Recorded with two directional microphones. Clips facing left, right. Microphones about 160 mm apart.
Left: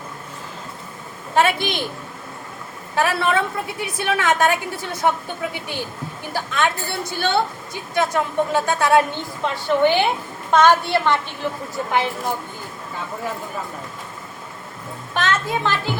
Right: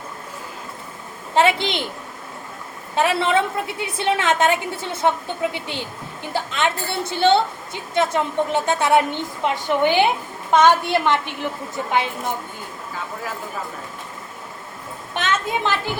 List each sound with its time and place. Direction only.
1.4 s a woman's voice: 25° right (ahead or behind)
2.9 s a woman's voice: 20° right (ahead or behind)
15.1 s a child's voice: 20° right (ahead or behind)